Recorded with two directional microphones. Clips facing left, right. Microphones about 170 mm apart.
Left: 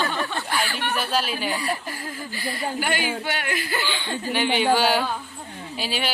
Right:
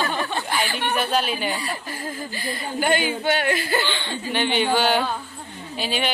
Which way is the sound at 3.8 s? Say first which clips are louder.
Even; 5° left (ahead or behind).